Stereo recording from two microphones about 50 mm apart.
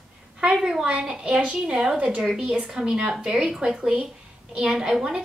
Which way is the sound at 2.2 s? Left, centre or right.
Centre.